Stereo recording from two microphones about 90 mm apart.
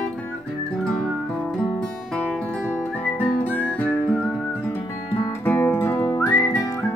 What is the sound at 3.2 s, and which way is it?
Music, 20° left (ahead or behind).